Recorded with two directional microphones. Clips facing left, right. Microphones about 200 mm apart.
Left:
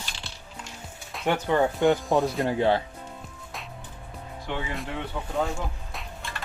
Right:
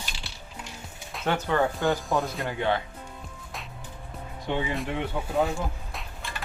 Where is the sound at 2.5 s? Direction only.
30° left (ahead or behind).